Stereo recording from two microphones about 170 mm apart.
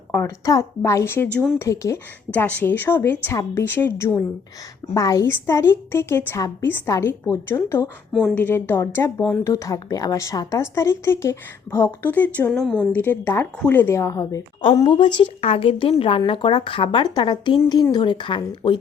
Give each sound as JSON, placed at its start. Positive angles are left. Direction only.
{"t": 0.1, "sound": "speech", "side_deg": 15}
{"t": 8.1, "sound": "a woman's voice", "side_deg": 0}